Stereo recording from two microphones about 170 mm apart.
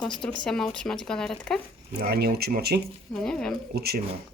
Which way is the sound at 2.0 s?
65° right (ahead or behind).